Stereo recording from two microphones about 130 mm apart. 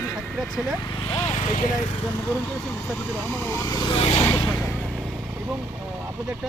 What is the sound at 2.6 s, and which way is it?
Speech, 5° left (ahead or behind).